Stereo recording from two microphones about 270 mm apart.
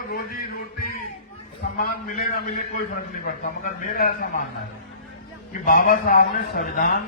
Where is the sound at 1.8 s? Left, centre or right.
Left.